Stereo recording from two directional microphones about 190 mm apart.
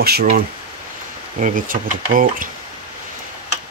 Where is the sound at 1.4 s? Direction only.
45° right (ahead or behind).